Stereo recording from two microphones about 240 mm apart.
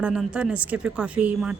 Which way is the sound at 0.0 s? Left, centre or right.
Centre.